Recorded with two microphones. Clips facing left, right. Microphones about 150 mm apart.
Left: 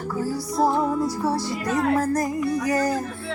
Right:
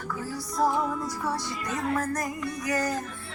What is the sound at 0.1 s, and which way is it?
Music, 35° left (ahead or behind).